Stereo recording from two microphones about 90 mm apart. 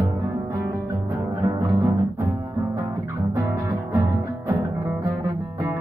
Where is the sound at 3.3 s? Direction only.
35° right (ahead or behind).